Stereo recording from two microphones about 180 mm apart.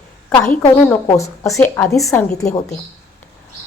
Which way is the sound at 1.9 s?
Centre (ahead or behind).